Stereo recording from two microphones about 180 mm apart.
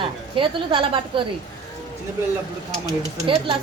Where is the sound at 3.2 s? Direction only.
30° right (ahead or behind).